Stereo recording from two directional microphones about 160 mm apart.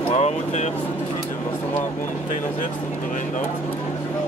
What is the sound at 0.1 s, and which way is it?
Speech, 45° left (ahead or behind).